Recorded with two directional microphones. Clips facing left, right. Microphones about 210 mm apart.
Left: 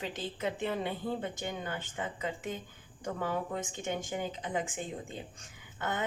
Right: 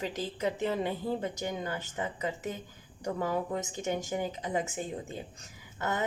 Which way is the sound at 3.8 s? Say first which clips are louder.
Right 3 dB; 40° right (ahead or behind).